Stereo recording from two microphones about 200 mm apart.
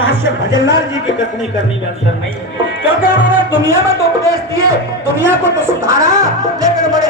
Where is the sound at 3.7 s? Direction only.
15° right (ahead or behind).